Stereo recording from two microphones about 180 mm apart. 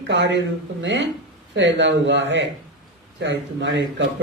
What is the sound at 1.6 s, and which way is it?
Speech, 90° right.